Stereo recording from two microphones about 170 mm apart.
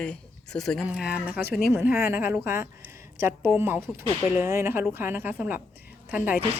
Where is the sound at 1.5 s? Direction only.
70° left (ahead or behind).